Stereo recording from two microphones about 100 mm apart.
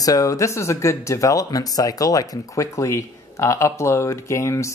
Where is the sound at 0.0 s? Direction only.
35° left (ahead or behind).